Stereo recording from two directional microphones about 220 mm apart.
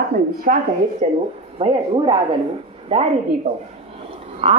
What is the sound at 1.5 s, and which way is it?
A woman's voice, 25° right (ahead or behind).